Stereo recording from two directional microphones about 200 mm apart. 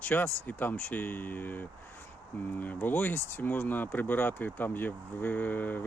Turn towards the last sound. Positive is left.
turn(degrees=10)  # may be behind; listen again after turning